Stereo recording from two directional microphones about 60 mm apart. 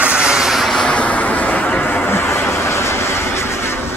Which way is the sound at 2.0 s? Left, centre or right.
Left.